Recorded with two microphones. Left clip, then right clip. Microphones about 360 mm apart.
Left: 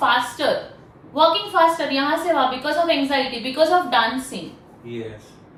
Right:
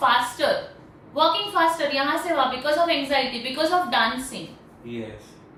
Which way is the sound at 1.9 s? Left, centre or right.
Centre.